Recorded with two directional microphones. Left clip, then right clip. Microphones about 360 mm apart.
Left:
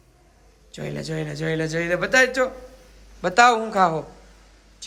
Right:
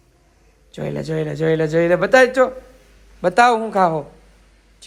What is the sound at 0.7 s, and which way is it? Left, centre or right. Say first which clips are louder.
Speech: right 6 dB; centre.